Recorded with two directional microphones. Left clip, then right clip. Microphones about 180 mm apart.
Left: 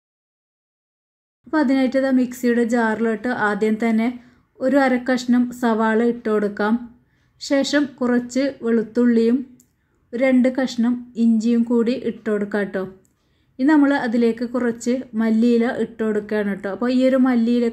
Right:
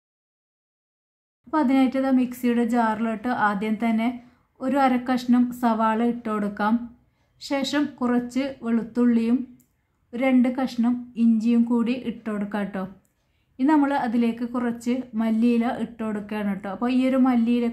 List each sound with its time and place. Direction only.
1.5 s a woman's voice: 15° left (ahead or behind)